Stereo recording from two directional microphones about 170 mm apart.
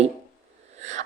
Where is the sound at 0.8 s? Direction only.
40° right (ahead or behind).